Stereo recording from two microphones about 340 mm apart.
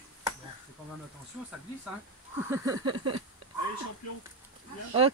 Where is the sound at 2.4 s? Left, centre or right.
Centre.